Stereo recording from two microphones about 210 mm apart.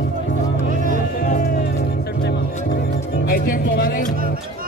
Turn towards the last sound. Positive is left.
turn(degrees=45)  # may be behind; listen again after turning